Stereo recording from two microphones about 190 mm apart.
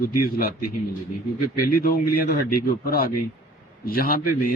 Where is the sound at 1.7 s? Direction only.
50° left (ahead or behind).